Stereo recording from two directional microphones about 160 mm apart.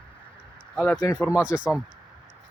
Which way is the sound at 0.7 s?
10° left (ahead or behind).